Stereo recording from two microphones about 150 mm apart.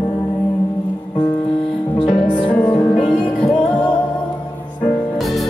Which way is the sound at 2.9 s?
5° left (ahead or behind).